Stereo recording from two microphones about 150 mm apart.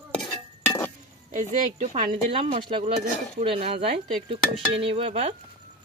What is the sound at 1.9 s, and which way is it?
Speech, 40° right (ahead or behind).